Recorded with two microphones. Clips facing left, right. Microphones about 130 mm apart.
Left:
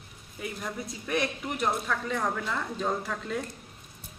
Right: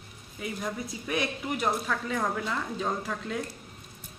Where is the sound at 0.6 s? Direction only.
Centre (ahead or behind).